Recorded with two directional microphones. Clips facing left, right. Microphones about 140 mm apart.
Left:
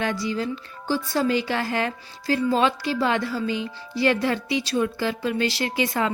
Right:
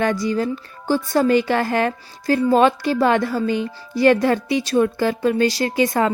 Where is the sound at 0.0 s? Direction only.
45° right (ahead or behind).